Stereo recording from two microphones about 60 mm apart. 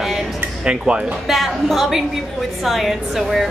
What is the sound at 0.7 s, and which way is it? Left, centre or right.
Speech, centre.